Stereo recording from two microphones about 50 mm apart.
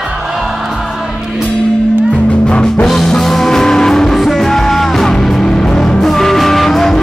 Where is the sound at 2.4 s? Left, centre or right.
Centre.